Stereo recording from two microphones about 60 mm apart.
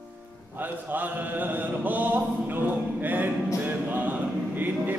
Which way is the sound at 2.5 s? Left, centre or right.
Right.